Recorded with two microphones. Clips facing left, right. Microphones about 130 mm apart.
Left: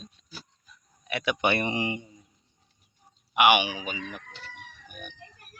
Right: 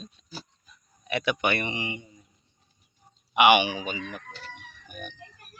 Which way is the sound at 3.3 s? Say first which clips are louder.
Right 2 dB; 10° left (ahead or behind).